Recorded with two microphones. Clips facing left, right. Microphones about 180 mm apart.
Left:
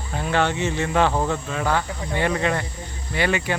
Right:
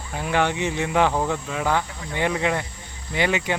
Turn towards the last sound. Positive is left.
turn(degrees=-20)  # may be behind; listen again after turning